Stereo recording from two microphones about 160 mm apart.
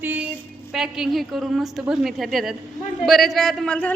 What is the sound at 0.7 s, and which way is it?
A woman's voice, 5° right (ahead or behind).